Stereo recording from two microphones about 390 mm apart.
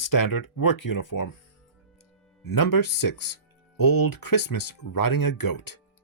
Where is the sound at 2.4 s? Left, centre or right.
Left.